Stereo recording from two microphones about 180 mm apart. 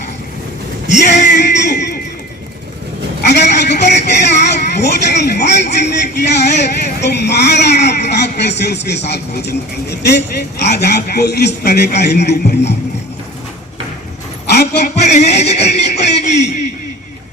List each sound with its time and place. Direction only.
1.4 s music: 65° left (ahead or behind)
3.2 s a man's voice: 70° left (ahead or behind)
14.5 s a sound: 65° left (ahead or behind)
15.0 s speech: 40° left (ahead or behind)
15.7 s music: 40° left (ahead or behind)